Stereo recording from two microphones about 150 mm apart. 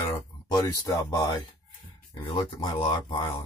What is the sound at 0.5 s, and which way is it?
Speech, 25° left (ahead or behind).